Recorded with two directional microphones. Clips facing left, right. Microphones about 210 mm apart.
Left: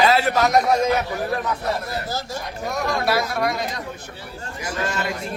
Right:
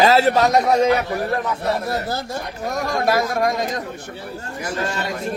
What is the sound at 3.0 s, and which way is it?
Speech, 45° right (ahead or behind).